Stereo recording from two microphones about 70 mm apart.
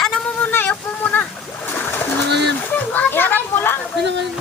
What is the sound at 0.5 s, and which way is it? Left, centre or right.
Splash, left.